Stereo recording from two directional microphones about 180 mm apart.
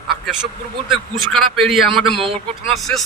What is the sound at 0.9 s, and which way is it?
A man's voice, centre (ahead or behind).